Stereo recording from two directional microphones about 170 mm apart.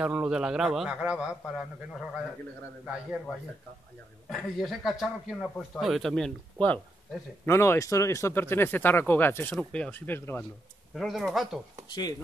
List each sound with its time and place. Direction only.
0.0 s a man's voice: 5° right (ahead or behind)
4.3 s a man's voice: centre (ahead or behind)
11.0 s a man's voice: centre (ahead or behind)
11.9 s speech: 25° left (ahead or behind)